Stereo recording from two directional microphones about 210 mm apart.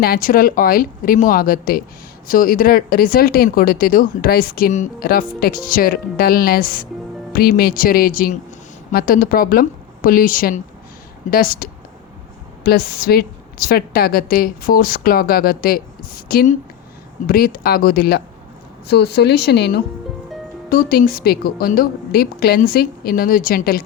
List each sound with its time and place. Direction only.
0.0 s speech: 45° left (ahead or behind)